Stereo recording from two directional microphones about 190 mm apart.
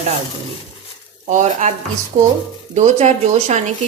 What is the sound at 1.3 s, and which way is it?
A woman's voice, 40° right (ahead or behind).